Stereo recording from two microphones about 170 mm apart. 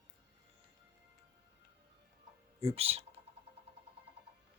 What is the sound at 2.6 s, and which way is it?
Speech, 35° right (ahead or behind).